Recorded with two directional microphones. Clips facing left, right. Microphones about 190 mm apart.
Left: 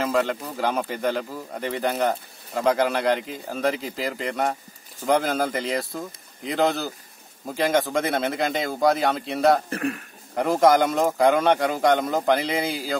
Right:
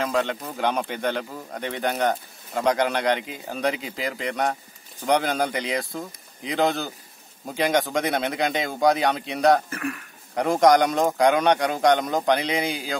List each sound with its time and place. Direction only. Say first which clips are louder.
0.0 s speech: left 1 dB; 5° left (ahead or behind)
9.7 s speech: left 3 dB; 35° left (ahead or behind)
10.3 s speech: even; 5° left (ahead or behind)